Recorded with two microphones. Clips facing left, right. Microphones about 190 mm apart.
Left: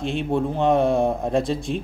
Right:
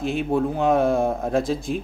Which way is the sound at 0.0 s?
5° right (ahead or behind).